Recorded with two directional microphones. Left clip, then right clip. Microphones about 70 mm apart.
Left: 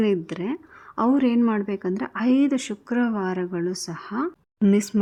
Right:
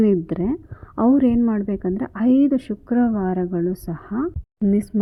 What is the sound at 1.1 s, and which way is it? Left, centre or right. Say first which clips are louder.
Speech: right 3 dB; right.